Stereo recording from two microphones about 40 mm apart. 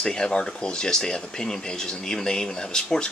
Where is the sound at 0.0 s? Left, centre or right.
Centre.